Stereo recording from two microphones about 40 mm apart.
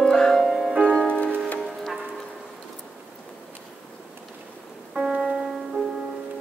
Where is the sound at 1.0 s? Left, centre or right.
Left.